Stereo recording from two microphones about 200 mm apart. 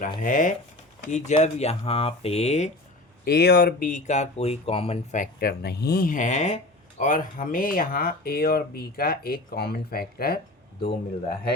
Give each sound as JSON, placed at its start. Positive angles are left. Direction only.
{"t": 0.2, "sound": "speech", "side_deg": 40}
{"t": 3.2, "sound": "speech", "side_deg": 55}